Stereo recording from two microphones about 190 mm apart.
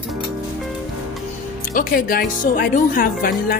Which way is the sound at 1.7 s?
45° left (ahead or behind).